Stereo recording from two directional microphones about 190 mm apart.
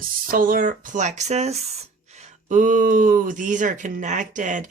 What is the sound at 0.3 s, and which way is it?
Speech, 50° right (ahead or behind).